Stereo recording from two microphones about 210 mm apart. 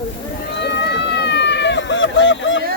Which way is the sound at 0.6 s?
55° left (ahead or behind).